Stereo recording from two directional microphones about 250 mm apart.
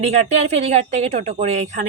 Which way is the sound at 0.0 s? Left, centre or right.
Right.